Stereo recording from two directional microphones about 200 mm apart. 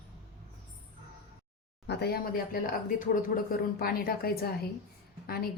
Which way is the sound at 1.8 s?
55° left (ahead or behind).